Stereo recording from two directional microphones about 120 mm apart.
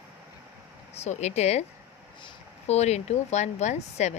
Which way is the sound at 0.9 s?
65° left (ahead or behind).